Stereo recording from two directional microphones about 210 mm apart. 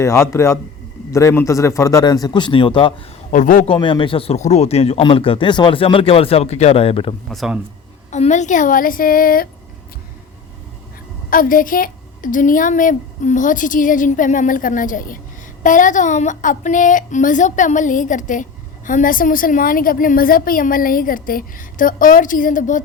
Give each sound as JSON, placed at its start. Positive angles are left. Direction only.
{"t": 0.0, "sound": "a man's voice", "side_deg": 15}
{"t": 3.3, "sound": "a woman's voice", "side_deg": 40}
{"t": 3.7, "sound": "speech", "side_deg": 25}
{"t": 7.3, "sound": "a man's voice", "side_deg": 0}
{"t": 8.1, "sound": "a woman's voice", "side_deg": 35}
{"t": 11.3, "sound": "a woman's voice", "side_deg": 40}